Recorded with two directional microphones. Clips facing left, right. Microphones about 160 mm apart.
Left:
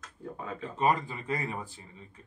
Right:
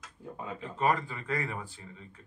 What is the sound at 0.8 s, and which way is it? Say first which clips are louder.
Speech: left 1 dB; 20° left (ahead or behind).